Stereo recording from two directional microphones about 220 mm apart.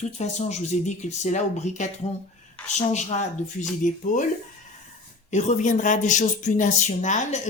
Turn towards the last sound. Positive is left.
turn(degrees=30)  # may be behind; listen again after turning